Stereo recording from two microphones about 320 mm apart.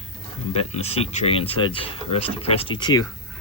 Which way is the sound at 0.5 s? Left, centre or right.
Centre.